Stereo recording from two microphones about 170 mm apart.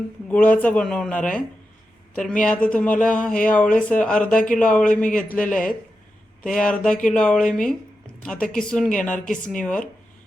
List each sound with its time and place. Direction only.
0.3 s a man's voice: 10° left (ahead or behind)